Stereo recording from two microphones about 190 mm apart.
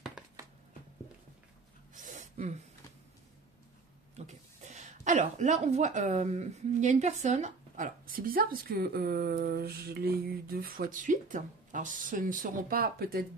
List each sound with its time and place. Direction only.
2.0 s gasp: 45° right (ahead or behind)
4.1 s speech: 35° right (ahead or behind)